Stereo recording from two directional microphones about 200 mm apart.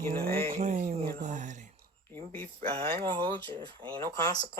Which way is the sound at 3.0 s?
25° right (ahead or behind).